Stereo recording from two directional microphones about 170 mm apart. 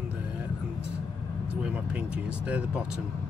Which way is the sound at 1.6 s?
5° right (ahead or behind).